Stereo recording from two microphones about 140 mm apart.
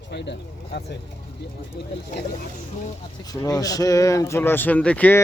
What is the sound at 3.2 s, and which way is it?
Speech, 25° left (ahead or behind).